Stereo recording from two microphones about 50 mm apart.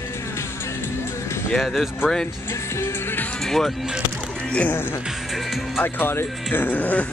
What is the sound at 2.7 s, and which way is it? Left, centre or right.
Music, left.